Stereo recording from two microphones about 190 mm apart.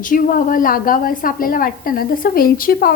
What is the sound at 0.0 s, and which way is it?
A woman's voice, 45° left (ahead or behind).